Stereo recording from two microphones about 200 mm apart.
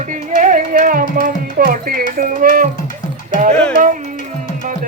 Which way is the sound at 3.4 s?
35° right (ahead or behind).